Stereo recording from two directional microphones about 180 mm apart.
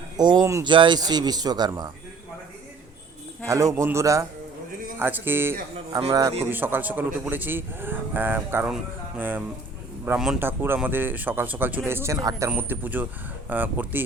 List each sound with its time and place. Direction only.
0.2 s a man's voice: 25° right (ahead or behind)
3.4 s a man's voice: 15° right (ahead or behind)